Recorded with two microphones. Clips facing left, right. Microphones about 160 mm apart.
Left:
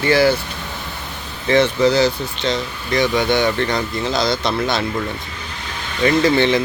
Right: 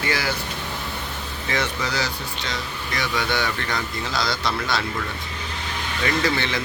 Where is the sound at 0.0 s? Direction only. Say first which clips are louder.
Left 11 dB; 30° left (ahead or behind).